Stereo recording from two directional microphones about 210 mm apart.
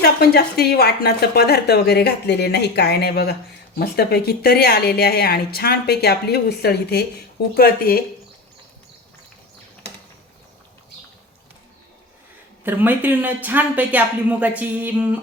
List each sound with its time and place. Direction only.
0.0 s a woman's voice: 50° left (ahead or behind)
12.6 s speech: 10° right (ahead or behind)